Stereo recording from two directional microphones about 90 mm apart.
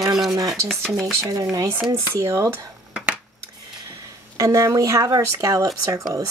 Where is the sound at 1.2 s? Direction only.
40° right (ahead or behind).